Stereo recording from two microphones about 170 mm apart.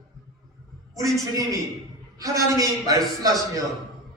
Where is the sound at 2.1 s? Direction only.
20° right (ahead or behind).